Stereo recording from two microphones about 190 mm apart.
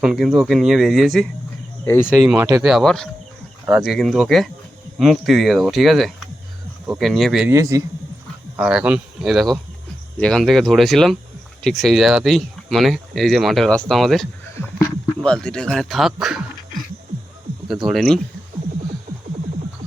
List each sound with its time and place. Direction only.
0.0 s speech: centre (ahead or behind)
1.8 s speech: 10° left (ahead or behind)
2.2 s speech: 10° right (ahead or behind)
7.5 s a man's voice: 15° right (ahead or behind)
8.5 s speech: 5° right (ahead or behind)
17.8 s speech: centre (ahead or behind)